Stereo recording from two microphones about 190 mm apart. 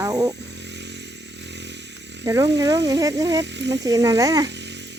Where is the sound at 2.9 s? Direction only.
20° right (ahead or behind).